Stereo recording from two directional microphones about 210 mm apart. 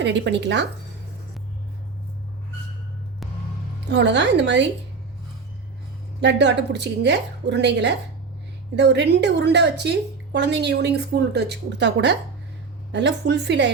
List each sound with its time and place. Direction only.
0.0 s a woman's voice: 60° right (ahead or behind)
3.8 s a woman's voice: 55° right (ahead or behind)
6.1 s a woman's voice: 55° right (ahead or behind)